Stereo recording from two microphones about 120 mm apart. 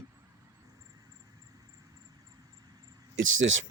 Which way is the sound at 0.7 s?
30° right (ahead or behind).